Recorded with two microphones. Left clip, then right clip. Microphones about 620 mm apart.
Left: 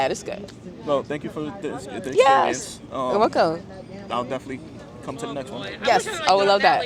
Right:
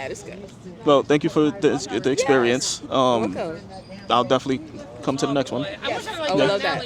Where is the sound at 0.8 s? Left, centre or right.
Right.